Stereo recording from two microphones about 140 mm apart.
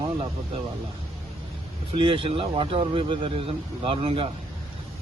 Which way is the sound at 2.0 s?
40° right (ahead or behind).